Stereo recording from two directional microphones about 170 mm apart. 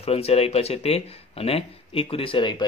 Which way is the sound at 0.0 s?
35° left (ahead or behind).